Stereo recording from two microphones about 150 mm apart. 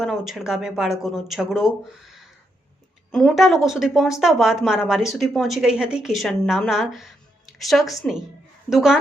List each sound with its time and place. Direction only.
0.0 s speech: centre (ahead or behind)